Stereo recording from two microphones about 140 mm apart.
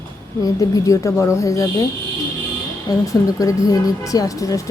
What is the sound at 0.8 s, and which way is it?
A woman's voice, 20° left (ahead or behind).